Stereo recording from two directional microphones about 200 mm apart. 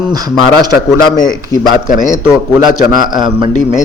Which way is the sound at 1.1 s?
20° left (ahead or behind).